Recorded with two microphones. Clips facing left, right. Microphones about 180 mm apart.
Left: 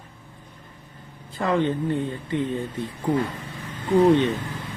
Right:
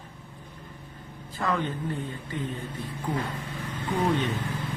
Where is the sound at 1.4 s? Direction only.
25° left (ahead or behind).